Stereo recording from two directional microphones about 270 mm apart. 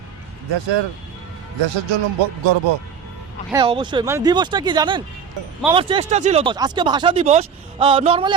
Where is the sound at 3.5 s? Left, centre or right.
Centre.